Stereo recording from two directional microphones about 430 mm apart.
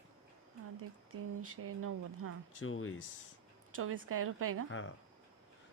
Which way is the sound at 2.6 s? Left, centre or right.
Left.